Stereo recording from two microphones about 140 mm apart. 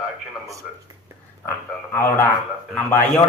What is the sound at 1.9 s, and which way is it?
Speech, 15° left (ahead or behind).